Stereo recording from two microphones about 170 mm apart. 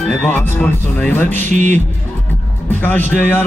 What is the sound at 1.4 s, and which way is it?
Speech, 45° right (ahead or behind).